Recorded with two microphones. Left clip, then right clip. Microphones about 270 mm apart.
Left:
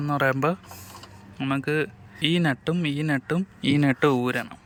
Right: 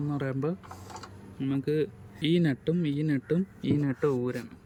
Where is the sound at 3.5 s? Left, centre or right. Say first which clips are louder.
Left 7 dB; left.